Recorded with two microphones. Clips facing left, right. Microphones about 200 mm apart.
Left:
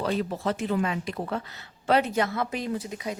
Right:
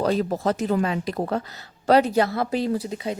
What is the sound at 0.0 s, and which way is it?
A woman's voice, 40° right (ahead or behind).